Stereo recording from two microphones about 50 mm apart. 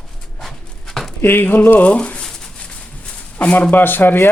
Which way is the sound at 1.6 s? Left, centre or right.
Left.